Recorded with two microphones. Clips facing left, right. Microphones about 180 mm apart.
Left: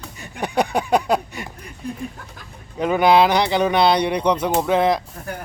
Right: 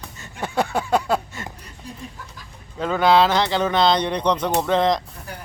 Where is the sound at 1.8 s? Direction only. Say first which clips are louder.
Left 9 dB; 55° left (ahead or behind).